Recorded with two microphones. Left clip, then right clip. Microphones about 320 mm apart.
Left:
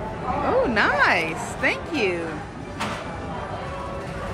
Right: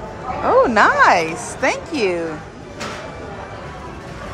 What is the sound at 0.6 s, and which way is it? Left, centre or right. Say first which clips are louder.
A woman's voice: right 8 dB; centre.